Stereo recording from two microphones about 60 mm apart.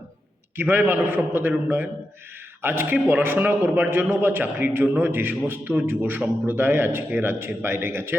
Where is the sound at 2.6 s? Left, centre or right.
Right.